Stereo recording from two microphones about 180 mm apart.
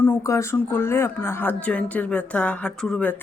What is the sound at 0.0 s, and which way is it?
Speech, 15° left (ahead or behind).